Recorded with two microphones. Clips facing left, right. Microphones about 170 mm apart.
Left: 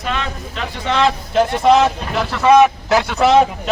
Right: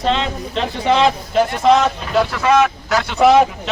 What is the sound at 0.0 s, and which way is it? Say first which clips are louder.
Speech: right 5 dB; 25° right (ahead or behind).